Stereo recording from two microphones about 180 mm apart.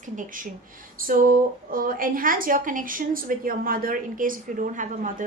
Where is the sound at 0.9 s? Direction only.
50° right (ahead or behind).